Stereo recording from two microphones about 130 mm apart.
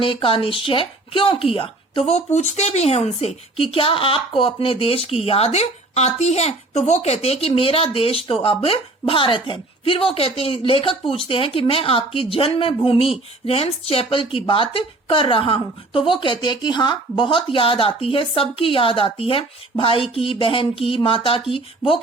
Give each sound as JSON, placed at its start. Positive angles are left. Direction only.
{"t": 0.0, "sound": "speech", "side_deg": 45}